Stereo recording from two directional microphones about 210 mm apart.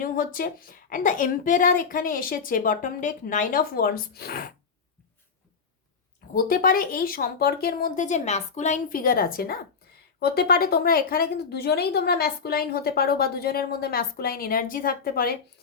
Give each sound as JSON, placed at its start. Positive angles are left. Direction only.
{"t": 0.0, "sound": "a woman's voice", "side_deg": 40}
{"t": 6.3, "sound": "a woman's voice", "side_deg": 45}